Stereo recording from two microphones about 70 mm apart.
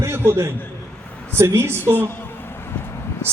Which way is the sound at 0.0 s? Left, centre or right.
Right.